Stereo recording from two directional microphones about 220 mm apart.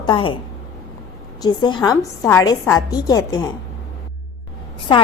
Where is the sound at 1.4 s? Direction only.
20° left (ahead or behind).